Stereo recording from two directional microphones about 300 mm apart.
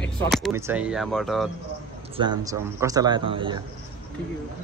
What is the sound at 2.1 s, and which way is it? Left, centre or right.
A man's voice, centre.